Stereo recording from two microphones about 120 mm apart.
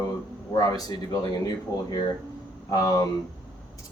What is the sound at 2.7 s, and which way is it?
Speech, 30° left (ahead or behind).